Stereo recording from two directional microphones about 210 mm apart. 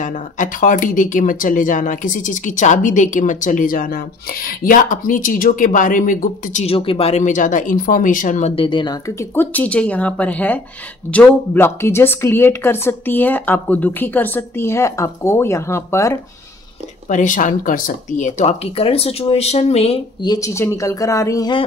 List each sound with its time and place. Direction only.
0.0 s speech: 35° left (ahead or behind); by 16.2 s 15° left (ahead or behind)
17.1 s speech: 35° left (ahead or behind); by 21.6 s 20° left (ahead or behind)